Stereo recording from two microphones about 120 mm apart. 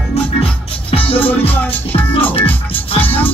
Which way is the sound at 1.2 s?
15° left (ahead or behind).